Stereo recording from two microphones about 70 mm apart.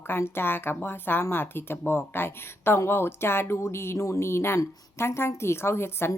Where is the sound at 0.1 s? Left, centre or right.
Left.